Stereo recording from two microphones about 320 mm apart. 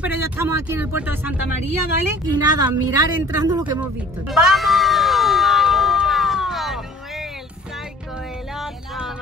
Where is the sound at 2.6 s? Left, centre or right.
Centre.